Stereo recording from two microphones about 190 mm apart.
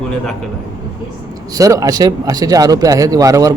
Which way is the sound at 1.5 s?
15° right (ahead or behind).